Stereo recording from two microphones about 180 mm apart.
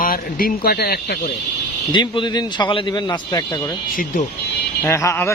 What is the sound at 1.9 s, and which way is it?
Speech, 25° left (ahead or behind).